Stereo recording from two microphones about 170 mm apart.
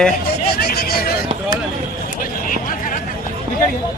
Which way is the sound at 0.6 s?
65° left (ahead or behind).